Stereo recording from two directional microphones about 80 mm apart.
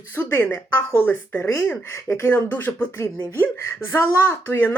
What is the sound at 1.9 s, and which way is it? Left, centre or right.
Speech, left.